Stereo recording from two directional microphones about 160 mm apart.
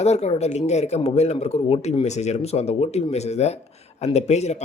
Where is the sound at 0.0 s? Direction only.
40° left (ahead or behind).